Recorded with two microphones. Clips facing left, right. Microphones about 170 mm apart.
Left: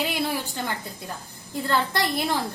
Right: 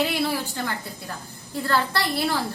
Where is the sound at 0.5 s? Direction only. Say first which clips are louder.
Right 1 dB; 20° left (ahead or behind).